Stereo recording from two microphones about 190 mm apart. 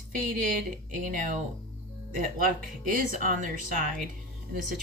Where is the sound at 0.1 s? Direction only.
45° right (ahead or behind).